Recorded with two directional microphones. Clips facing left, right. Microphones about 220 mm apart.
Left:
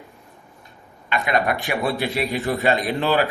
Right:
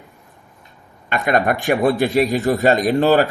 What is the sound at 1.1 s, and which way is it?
A man's voice, 50° right (ahead or behind).